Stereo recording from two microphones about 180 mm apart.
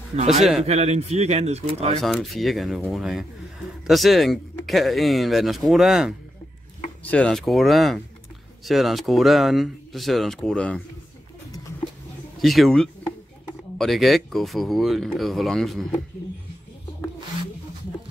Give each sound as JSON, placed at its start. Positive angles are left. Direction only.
{"t": 0.4, "sound": "speech", "side_deg": 0}
{"t": 0.7, "sound": "speech", "side_deg": -35}
{"t": 2.0, "sound": "speech", "side_deg": 0}
{"t": 12.4, "sound": "speech", "side_deg": 0}